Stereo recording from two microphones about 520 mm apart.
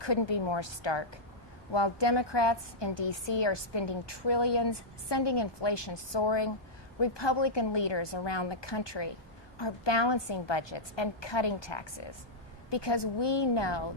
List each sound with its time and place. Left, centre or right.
0.0 s a woman's voice: left